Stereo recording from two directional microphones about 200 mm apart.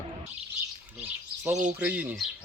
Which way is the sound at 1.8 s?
5° right (ahead or behind).